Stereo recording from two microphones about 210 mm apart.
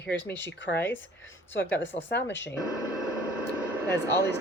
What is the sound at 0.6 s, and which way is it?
Speech, 60° left (ahead or behind).